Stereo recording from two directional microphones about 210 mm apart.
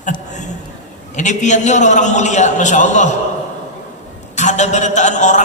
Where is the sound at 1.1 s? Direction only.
35° left (ahead or behind).